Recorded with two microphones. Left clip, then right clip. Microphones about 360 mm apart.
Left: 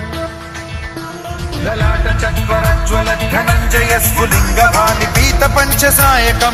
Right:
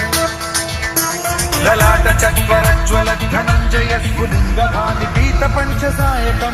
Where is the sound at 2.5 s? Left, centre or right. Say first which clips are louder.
Left 1 dB; centre; by 4.6 s left.